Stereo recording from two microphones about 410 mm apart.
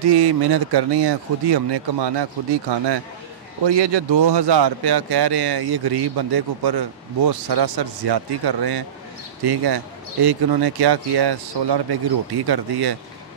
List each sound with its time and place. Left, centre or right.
0.1 s speech: right
3.6 s speech: right